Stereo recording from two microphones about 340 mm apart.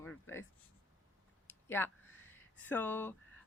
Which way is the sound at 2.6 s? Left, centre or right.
Centre.